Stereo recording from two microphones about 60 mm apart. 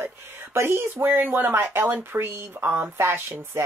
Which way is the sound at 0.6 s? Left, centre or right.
Right.